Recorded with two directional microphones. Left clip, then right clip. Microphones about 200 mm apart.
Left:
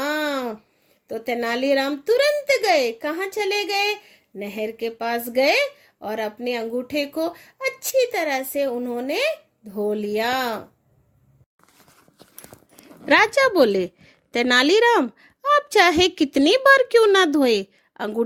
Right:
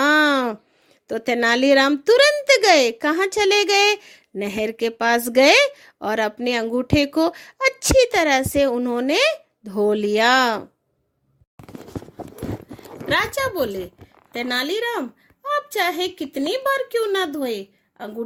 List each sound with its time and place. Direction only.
0.0 s a sound: 50° right (ahead or behind)
1.0 s a child's voice: 50° right (ahead or behind)
13.1 s a woman's voice: 40° left (ahead or behind)